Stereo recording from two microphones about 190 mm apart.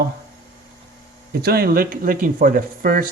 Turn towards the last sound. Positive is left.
turn(degrees=-50)  # may be behind; listen again after turning